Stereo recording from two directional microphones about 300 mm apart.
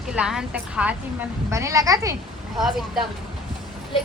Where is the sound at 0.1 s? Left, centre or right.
Centre.